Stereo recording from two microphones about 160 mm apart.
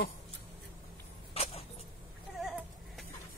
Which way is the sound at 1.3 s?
40° left (ahead or behind).